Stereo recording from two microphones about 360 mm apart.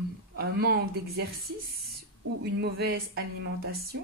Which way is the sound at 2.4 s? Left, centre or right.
Right.